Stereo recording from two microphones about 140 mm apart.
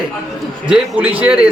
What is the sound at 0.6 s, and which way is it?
Speech, 10° right (ahead or behind).